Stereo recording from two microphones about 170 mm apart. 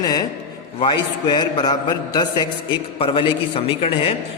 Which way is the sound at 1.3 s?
25° left (ahead or behind).